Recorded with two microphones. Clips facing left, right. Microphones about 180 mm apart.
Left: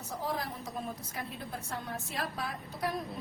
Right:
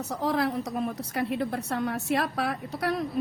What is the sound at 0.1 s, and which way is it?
A woman's voice, 75° right (ahead or behind).